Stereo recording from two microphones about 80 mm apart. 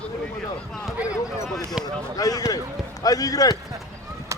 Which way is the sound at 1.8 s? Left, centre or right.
Left.